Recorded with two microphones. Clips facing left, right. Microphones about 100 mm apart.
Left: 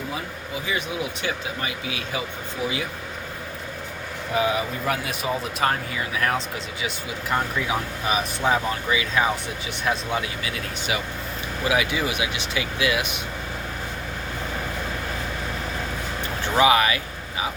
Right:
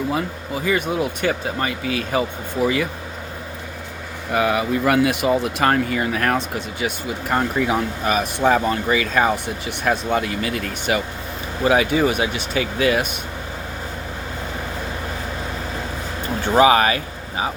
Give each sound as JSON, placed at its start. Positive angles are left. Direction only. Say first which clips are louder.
{"t": 0.1, "sound": "speech", "louder": "right 7 dB", "side_deg": -60}
{"t": 4.4, "sound": "speech", "louder": "right 4 dB", "side_deg": -65}
{"t": 11.6, "sound": "speech", "louder": "right 7 dB", "side_deg": -40}
{"t": 16.6, "sound": "speech", "louder": "right 4 dB", "side_deg": -40}